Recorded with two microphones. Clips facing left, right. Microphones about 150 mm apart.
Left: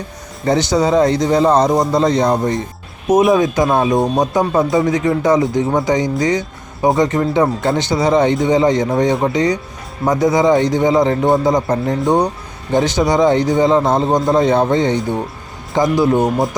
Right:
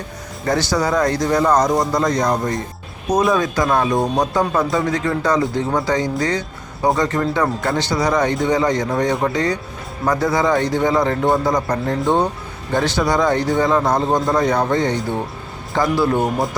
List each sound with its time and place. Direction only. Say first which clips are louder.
0.4 s speech: left 4 dB; 20° left (ahead or behind)